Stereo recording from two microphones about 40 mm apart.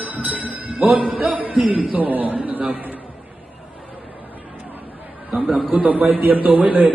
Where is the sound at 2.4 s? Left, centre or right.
Right.